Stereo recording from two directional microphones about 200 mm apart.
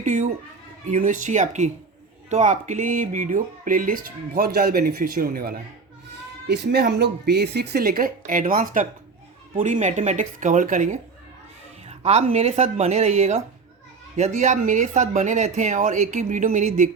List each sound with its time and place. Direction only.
0.0 s speech: 35° right (ahead or behind)